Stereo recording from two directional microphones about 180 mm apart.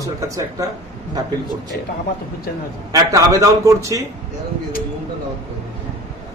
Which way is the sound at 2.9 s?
15° right (ahead or behind).